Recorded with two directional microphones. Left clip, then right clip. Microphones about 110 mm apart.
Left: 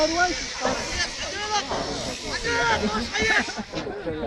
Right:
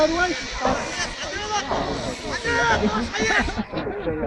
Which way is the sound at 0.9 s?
40° left (ahead or behind).